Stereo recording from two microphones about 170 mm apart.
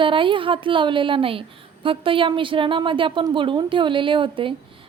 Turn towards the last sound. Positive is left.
turn(degrees=-30)  # may be behind; listen again after turning